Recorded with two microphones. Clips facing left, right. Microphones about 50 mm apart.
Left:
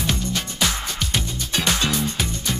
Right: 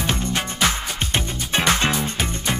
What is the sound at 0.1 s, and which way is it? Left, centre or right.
Music, right.